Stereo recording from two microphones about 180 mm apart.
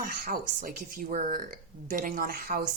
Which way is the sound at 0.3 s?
55° right (ahead or behind).